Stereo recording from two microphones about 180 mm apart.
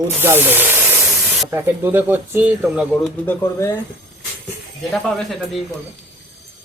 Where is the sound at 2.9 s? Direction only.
10° left (ahead or behind).